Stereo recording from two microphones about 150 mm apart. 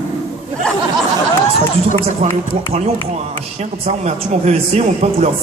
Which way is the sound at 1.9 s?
45° right (ahead or behind).